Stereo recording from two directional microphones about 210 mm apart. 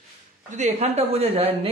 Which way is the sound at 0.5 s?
30° right (ahead or behind).